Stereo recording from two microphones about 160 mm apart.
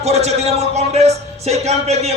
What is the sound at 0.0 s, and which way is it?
A man's voice, 40° right (ahead or behind).